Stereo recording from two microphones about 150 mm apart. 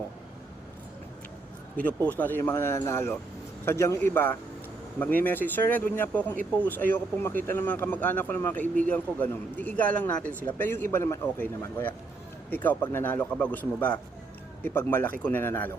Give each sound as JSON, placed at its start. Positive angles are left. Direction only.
{"t": 1.7, "sound": "speech", "side_deg": 10}